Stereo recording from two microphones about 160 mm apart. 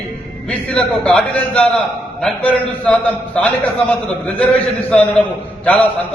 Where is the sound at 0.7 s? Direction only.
5° left (ahead or behind).